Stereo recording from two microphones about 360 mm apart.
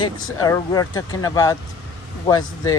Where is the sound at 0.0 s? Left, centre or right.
Centre.